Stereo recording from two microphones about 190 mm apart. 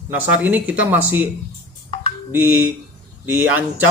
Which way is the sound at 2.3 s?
10° right (ahead or behind).